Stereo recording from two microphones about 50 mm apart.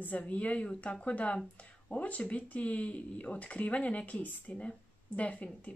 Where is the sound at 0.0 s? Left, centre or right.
Left.